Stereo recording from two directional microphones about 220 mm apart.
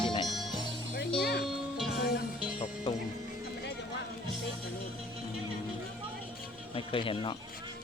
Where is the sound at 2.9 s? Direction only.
20° left (ahead or behind).